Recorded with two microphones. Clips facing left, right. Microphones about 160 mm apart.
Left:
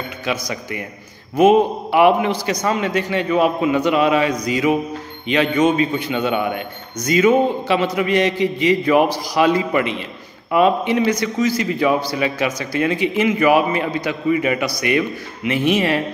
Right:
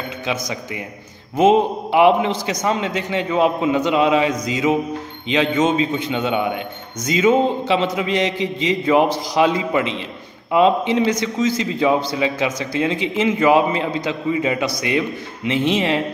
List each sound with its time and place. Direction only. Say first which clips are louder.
0.2 s a man's voice: left 1 dB; 20° right (ahead or behind)